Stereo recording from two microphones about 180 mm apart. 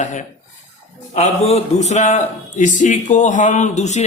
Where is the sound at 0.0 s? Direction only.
45° left (ahead or behind).